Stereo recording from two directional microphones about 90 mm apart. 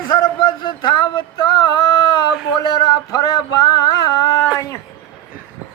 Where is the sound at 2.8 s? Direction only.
45° left (ahead or behind).